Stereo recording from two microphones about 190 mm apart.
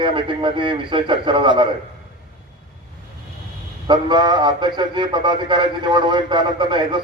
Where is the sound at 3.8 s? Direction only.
25° right (ahead or behind).